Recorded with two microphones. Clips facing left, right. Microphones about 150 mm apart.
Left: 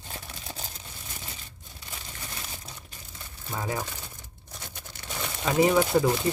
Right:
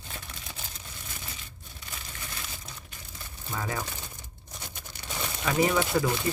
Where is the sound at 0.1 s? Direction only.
35° left (ahead or behind).